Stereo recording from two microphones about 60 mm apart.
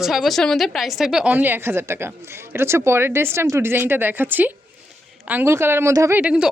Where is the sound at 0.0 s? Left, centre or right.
Centre.